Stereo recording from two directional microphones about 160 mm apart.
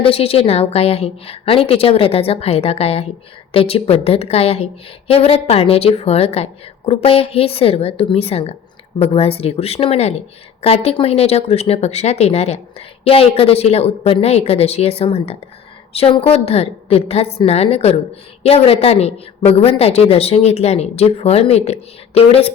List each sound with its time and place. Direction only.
0.0 s a woman's voice: 35° left (ahead or behind)